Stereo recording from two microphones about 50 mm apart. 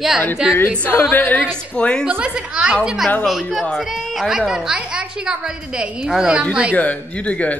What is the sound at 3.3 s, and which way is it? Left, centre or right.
A woman's voice, centre.